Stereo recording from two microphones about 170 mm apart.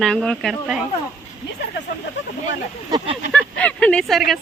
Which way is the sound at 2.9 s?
25° right (ahead or behind).